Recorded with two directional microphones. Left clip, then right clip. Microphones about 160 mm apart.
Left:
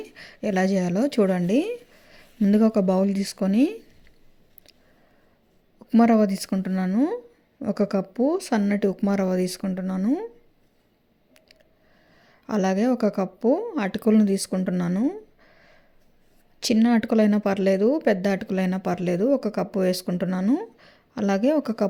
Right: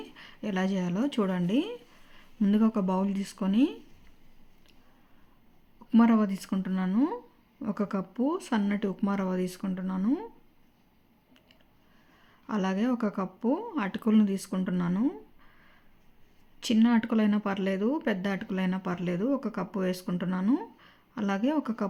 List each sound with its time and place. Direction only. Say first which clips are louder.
0.0 s speech: left 9 dB; 30° left (ahead or behind)
5.8 s speech: left 6 dB; 25° left (ahead or behind)
12.2 s a woman's voice: left 7 dB; 30° left (ahead or behind)